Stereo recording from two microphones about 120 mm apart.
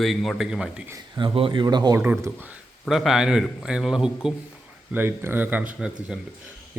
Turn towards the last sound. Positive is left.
turn(degrees=-5)  # may be behind; listen again after turning